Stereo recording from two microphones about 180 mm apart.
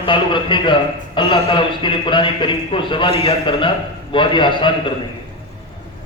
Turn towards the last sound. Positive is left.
turn(degrees=25)  # may be behind; listen again after turning